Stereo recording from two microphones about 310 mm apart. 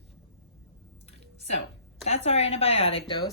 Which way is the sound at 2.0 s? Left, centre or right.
Centre.